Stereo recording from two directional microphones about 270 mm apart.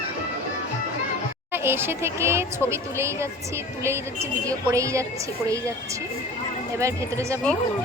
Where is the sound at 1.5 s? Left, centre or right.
Centre.